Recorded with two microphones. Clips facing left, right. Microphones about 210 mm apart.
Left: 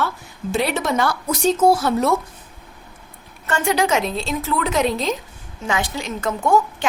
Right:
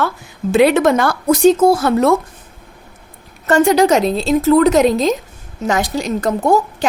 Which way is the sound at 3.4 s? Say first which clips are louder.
Right 9 dB; 40° right (ahead or behind).